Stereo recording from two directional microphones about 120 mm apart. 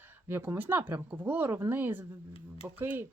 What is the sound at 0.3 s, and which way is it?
Speech, 20° right (ahead or behind).